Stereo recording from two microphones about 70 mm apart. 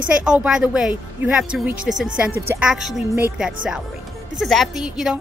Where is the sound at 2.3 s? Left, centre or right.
Right.